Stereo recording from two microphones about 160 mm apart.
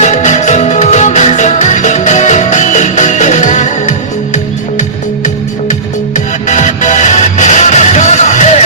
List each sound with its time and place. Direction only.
0.0 s music: 45° left (ahead or behind)
6.1 s music: 50° left (ahead or behind)